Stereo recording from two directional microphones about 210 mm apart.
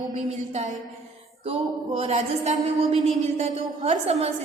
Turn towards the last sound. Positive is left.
turn(degrees=-30)  # may be behind; listen again after turning